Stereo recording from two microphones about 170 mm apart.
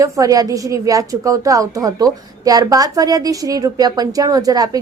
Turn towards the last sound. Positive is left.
turn(degrees=-20)  # may be behind; listen again after turning